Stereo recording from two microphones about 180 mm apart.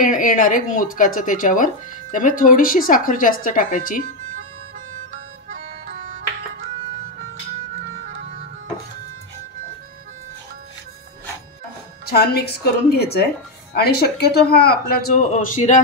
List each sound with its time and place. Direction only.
0.0 s speech: 45° left (ahead or behind)
5.5 s music: 45° right (ahead or behind)
12.1 s speech: 60° left (ahead or behind); by 15.8 s 40° left (ahead or behind)